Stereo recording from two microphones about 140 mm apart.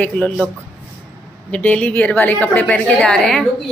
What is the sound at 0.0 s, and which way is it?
Speech, 10° left (ahead or behind).